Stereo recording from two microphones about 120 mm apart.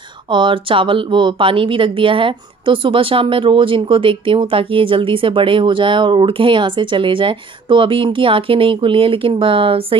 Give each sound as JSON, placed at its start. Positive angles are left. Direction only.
{"t": 0.3, "sound": "speech", "side_deg": -45}